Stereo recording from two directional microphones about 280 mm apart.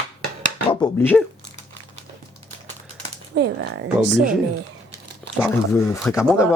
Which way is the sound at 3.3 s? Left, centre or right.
Right.